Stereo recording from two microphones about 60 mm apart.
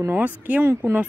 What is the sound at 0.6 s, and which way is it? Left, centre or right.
Speech, right.